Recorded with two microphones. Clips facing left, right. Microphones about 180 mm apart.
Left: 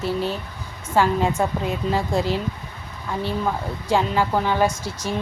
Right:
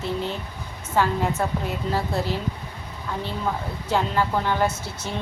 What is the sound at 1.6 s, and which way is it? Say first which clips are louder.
Speech: left 3 dB; 15° left (ahead or behind).